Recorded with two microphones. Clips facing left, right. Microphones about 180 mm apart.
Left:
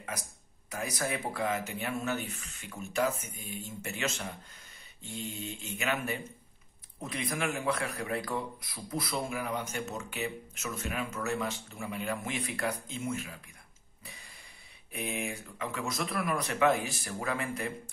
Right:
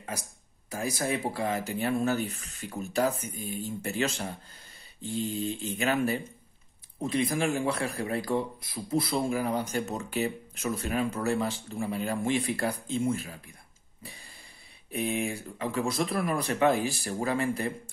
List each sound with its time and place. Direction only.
0.7 s speech: 30° right (ahead or behind)
14.0 s a sound: 30° right (ahead or behind)
14.9 s speech: 30° right (ahead or behind)